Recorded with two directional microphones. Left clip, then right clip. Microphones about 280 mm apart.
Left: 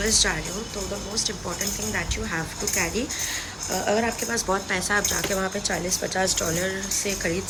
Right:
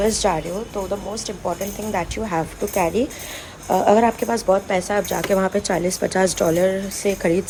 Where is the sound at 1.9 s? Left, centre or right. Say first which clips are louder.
Right 8 dB; centre.